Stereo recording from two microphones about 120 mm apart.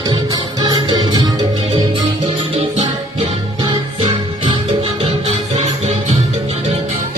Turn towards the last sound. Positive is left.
turn(degrees=-60)  # may be behind; listen again after turning